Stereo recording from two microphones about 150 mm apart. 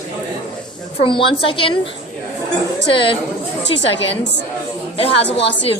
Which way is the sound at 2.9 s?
35° left (ahead or behind).